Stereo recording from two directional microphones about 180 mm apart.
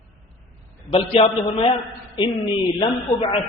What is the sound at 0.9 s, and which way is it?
Speech, 35° left (ahead or behind).